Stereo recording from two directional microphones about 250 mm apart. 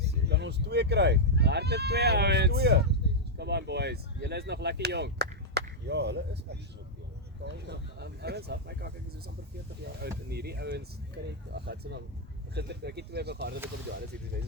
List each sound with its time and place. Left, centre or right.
0.0 s speech: right
10.0 s speech: right